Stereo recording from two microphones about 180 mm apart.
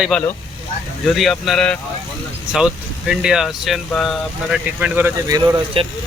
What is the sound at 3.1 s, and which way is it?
Speech, 5° right (ahead or behind).